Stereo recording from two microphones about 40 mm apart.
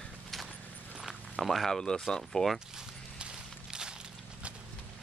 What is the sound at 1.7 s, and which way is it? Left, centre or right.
Speech, centre.